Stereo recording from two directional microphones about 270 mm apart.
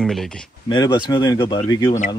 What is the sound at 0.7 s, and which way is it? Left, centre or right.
Speech, centre.